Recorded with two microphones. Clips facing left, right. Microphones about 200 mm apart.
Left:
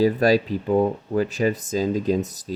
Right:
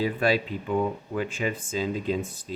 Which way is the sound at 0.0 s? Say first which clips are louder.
Left 7 dB; 40° left (ahead or behind).